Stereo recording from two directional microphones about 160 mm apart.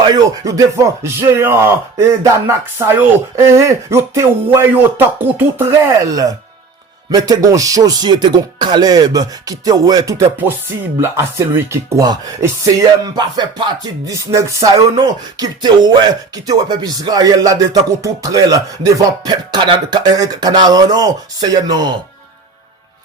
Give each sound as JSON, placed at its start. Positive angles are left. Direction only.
{"t": 0.0, "sound": "speech", "side_deg": -25}
{"t": 7.1, "sound": "music", "side_deg": -25}
{"t": 11.0, "sound": "speech", "side_deg": -15}
{"t": 13.1, "sound": "music", "side_deg": -25}